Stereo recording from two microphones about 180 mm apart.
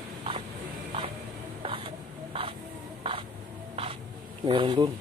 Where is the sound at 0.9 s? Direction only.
30° right (ahead or behind).